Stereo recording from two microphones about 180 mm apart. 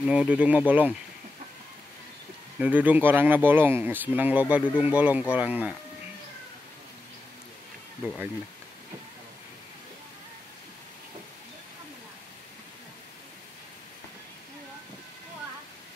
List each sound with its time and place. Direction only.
0.0 s speech: 5° right (ahead or behind)
2.6 s speech: 10° right (ahead or behind)